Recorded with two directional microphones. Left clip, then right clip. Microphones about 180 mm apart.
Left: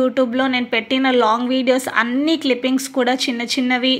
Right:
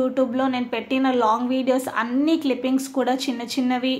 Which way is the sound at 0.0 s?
15° left (ahead or behind).